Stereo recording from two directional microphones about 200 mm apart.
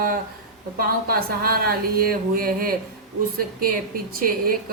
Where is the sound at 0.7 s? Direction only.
50° right (ahead or behind).